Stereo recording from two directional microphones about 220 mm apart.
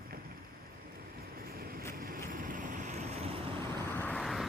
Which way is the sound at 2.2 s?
40° right (ahead or behind).